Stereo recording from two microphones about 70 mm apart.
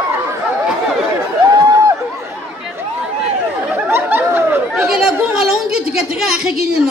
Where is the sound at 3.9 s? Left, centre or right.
Right.